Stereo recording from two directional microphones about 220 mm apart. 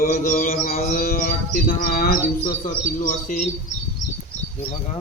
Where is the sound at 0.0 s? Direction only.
40° left (ahead or behind).